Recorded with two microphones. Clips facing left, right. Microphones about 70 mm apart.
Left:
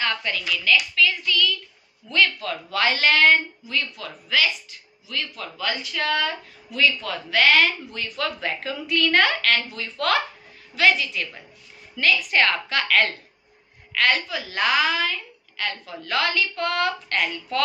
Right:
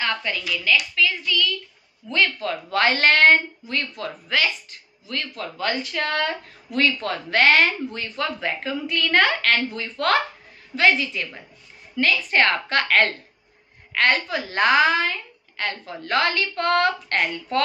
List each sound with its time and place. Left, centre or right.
0.0 s a sound: centre
0.9 s a woman's voice: centre
2.8 s a woman's voice: right
7.9 s a woman's voice: right